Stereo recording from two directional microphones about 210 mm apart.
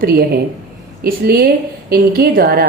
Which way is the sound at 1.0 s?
45° right (ahead or behind).